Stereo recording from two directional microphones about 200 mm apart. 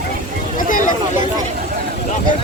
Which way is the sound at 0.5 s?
40° left (ahead or behind).